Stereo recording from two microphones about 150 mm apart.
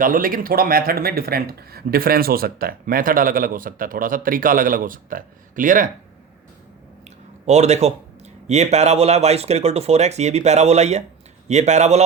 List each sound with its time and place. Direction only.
0.0 s speech: 70° right (ahead or behind)
7.4 s speech: 50° right (ahead or behind)